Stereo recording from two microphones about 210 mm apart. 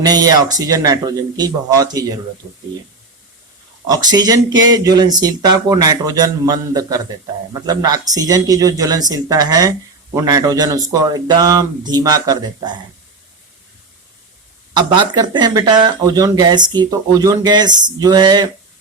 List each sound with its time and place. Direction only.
0.0 s speech: 20° right (ahead or behind)
3.8 s speech: 20° right (ahead or behind)
14.7 s speech: 20° right (ahead or behind)